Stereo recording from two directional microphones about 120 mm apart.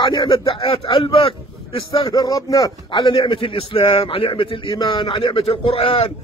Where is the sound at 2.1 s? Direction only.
30° left (ahead or behind).